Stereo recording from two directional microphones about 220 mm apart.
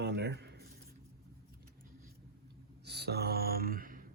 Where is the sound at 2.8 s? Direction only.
50° right (ahead or behind).